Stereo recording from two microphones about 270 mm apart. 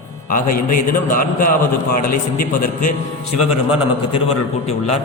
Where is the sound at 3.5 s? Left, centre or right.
Centre.